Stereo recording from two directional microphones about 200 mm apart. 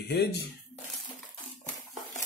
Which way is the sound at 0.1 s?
55° left (ahead or behind).